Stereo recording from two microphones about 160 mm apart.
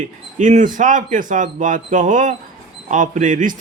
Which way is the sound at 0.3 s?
50° right (ahead or behind).